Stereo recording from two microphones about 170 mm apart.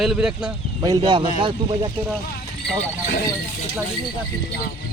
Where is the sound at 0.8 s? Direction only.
25° right (ahead or behind).